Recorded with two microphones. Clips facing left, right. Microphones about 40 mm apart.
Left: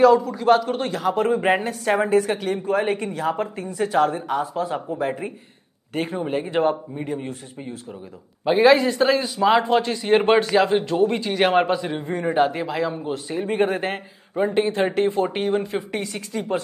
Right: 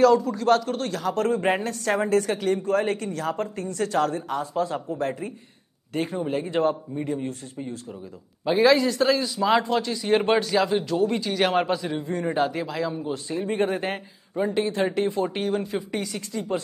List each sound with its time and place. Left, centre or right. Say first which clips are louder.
0.0 s speech: left 3 dB; centre
5.9 s speech: left 2 dB; left